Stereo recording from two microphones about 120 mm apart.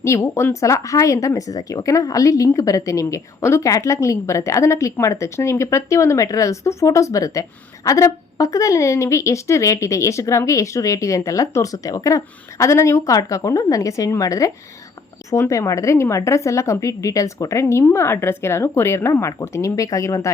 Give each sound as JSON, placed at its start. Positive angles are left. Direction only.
{"t": 0.0, "sound": "speech", "side_deg": 25}